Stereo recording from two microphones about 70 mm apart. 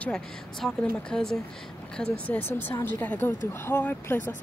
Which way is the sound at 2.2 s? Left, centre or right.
Left.